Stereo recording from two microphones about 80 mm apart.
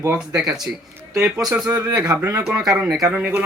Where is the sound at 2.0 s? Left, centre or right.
Right.